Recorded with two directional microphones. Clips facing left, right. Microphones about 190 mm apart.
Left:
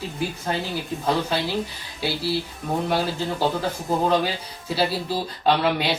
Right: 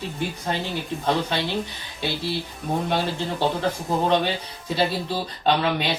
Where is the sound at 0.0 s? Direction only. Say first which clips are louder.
Even; centre (ahead or behind).